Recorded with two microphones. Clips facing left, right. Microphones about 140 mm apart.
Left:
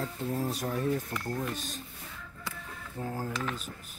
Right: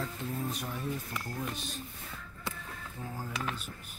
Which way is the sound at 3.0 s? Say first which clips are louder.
Left 5 dB; 50° left (ahead or behind).